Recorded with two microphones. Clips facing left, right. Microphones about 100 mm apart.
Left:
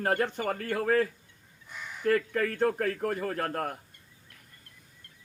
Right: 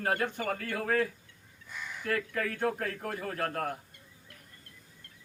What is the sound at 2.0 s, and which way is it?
A man's voice, 40° left (ahead or behind).